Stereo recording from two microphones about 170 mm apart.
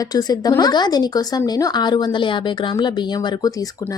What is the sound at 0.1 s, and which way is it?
Speech, 25° left (ahead or behind).